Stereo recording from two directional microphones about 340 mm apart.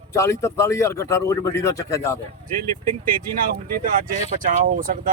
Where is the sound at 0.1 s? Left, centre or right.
Centre.